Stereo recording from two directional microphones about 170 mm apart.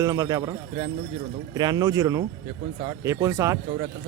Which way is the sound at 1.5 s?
25° right (ahead or behind).